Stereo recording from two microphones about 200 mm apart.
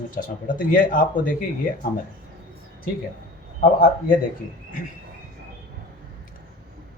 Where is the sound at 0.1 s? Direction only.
45° left (ahead or behind).